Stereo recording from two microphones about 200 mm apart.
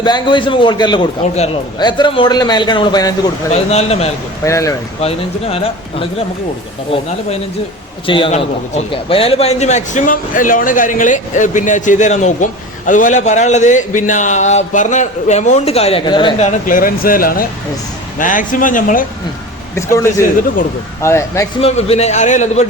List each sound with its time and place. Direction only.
0.0 s a man's voice: 20° left (ahead or behind)
3.5 s a man's voice: 30° left (ahead or behind)
4.4 s a man's voice: 15° left (ahead or behind)
4.9 s a man's voice: 30° left (ahead or behind)
8.0 s a man's voice: 25° left (ahead or behind)
16.6 s a man's voice: 45° left (ahead or behind)
19.7 s a man's voice: 15° left (ahead or behind)
21.6 s a man's voice: 30° left (ahead or behind)